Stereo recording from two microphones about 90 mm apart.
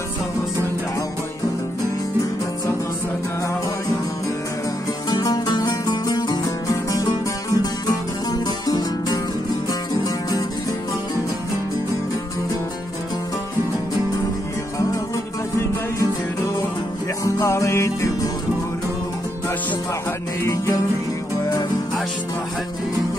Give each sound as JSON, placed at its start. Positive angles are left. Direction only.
{"t": 5.1, "sound": "music", "side_deg": 50}
{"t": 17.2, "sound": "music", "side_deg": 35}
{"t": 20.4, "sound": "music", "side_deg": 35}